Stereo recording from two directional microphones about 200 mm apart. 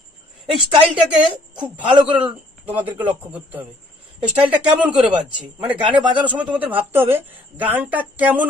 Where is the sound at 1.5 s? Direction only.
20° right (ahead or behind).